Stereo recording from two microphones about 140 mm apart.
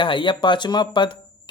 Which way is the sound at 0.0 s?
35° left (ahead or behind).